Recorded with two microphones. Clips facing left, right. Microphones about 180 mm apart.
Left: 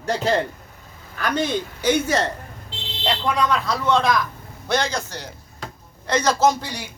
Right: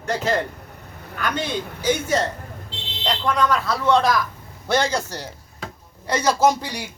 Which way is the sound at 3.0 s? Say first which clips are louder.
Even; 5° left (ahead or behind).